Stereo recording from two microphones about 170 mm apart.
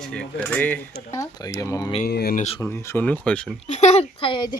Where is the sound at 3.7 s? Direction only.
40° left (ahead or behind).